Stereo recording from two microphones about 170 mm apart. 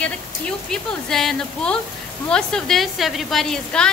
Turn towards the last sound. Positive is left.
turn(degrees=0)  # may be behind; listen again after turning